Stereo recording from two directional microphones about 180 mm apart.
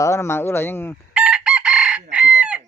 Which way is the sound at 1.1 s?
5° right (ahead or behind).